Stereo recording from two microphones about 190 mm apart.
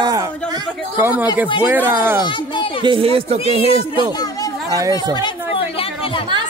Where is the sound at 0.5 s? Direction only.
15° right (ahead or behind).